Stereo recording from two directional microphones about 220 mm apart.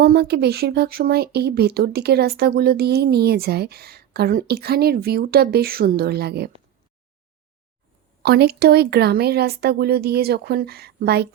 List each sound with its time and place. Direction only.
0.0 s speech: 45° right (ahead or behind)
8.2 s speech: 50° right (ahead or behind)